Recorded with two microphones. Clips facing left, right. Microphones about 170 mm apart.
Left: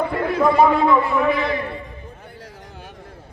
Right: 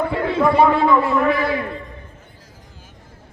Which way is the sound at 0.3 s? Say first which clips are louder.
Even; 25° right (ahead or behind).